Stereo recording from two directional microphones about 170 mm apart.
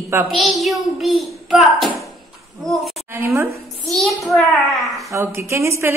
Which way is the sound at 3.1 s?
15° right (ahead or behind).